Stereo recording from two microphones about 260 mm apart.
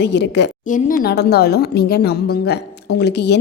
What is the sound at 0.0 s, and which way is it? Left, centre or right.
A woman's voice, left.